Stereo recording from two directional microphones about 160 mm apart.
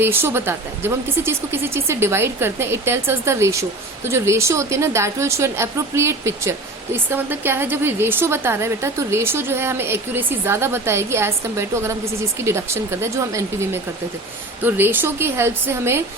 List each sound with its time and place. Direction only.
0.0 s a woman's voice: 15° right (ahead or behind)